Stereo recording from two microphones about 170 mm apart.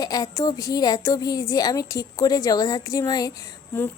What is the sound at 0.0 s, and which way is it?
A woman's voice, 20° left (ahead or behind).